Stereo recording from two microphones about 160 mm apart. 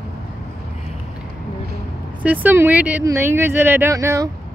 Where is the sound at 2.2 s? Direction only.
10° right (ahead or behind).